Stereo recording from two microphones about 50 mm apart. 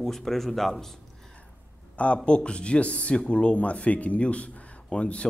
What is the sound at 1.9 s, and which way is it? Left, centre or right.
Speech, left.